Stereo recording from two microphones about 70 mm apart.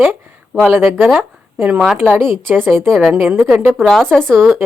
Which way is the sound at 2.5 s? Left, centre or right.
Right.